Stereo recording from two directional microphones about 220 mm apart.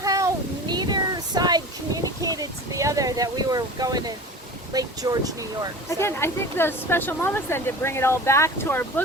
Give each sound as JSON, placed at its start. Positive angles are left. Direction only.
{"t": 0.0, "sound": "a sound", "side_deg": -15}
{"t": 4.7, "sound": "speech", "side_deg": -15}
{"t": 5.9, "sound": "speech", "side_deg": 10}